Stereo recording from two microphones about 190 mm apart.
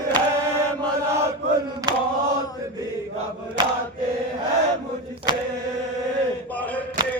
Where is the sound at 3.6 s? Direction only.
20° right (ahead or behind).